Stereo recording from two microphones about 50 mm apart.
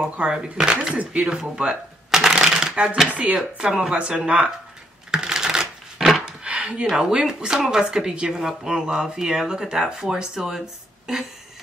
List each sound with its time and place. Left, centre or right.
0.0 s speech: centre
1.6 s shuffling cards: centre
3.3 s speech: centre
5.1 s typewriter: centre
6.4 s a sound: right
6.9 s speech: centre